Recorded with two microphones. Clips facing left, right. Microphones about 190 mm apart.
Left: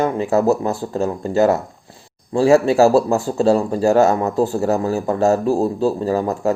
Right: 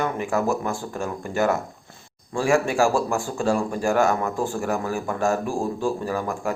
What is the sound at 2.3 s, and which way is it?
Speech, 35° left (ahead or behind).